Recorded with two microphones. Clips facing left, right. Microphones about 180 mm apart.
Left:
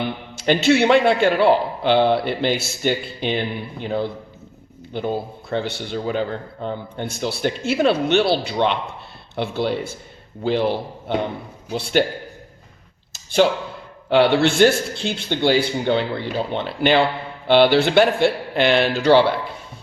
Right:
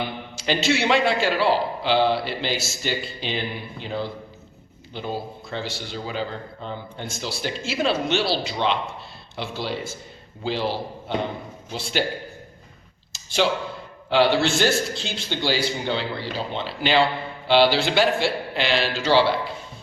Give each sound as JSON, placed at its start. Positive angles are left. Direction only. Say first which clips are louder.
{"t": 0.3, "sound": "a man's voice", "louder": "left 6 dB", "side_deg": 55}
{"t": 14.1, "sound": "a man's voice", "louder": "left 4 dB", "side_deg": 60}